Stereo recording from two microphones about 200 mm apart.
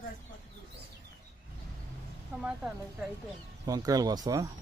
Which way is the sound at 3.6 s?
20° right (ahead or behind).